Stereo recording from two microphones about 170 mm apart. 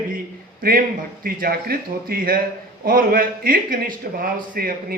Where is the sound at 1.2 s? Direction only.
60° right (ahead or behind).